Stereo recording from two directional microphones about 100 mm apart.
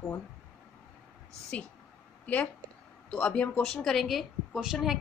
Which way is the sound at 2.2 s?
15° left (ahead or behind).